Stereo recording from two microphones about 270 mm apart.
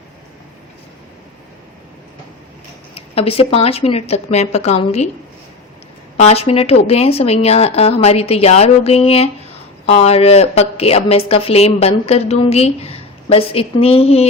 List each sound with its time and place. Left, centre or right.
2.9 s a woman's voice: left
6.1 s a woman's voice: left